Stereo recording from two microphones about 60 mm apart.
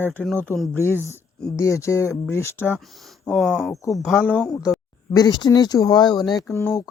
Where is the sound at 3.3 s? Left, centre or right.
Centre.